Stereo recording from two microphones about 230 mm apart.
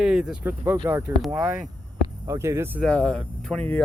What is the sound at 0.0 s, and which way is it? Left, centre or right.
Speech, centre.